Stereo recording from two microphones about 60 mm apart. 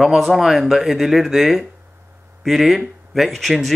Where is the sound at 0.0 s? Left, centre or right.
Centre.